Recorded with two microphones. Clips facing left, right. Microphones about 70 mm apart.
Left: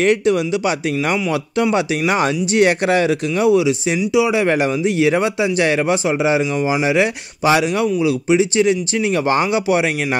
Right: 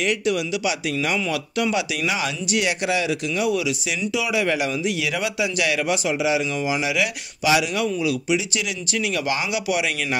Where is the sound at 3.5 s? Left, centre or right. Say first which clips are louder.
Left 9 dB; left.